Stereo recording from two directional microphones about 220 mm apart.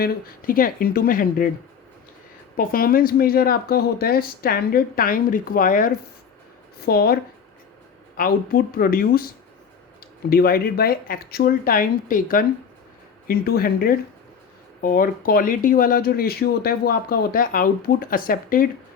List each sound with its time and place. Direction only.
0.0 s speech: 40° left (ahead or behind)
2.6 s speech: 40° left (ahead or behind)